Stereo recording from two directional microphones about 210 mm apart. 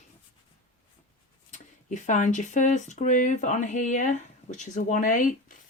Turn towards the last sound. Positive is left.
turn(degrees=40)  # may be behind; listen again after turning